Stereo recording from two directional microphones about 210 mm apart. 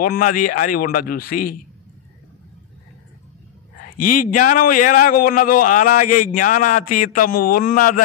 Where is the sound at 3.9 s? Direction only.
40° left (ahead or behind).